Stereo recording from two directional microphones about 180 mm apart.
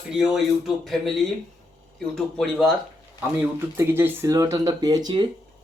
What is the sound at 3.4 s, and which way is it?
Speech, 15° right (ahead or behind).